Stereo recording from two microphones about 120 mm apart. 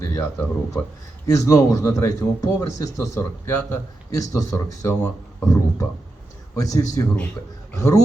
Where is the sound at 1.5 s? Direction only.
25° left (ahead or behind).